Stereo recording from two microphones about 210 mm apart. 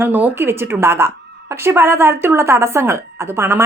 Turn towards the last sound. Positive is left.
turn(degrees=-10)  # may be behind; listen again after turning